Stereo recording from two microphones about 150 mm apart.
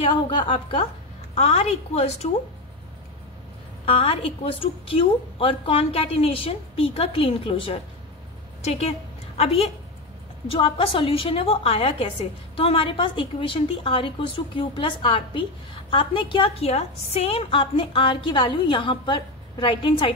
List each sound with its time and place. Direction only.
0.0 s a woman's voice: 30° left (ahead or behind)
3.8 s a woman's voice: 40° left (ahead or behind)